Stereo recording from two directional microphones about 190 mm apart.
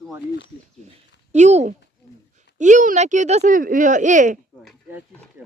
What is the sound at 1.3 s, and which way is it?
Speech, 35° right (ahead or behind).